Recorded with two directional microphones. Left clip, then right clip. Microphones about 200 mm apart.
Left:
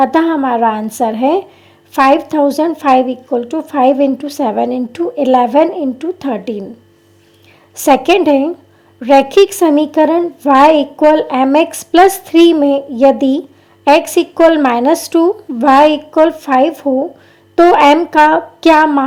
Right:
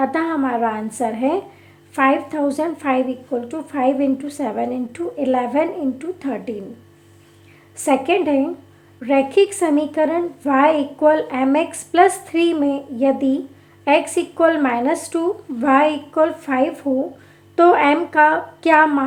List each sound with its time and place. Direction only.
0.0 s a woman's voice: 35° left (ahead or behind)
7.9 s a woman's voice: 40° left (ahead or behind)